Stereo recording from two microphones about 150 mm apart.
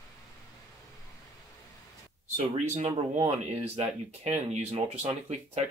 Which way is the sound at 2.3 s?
50° right (ahead or behind).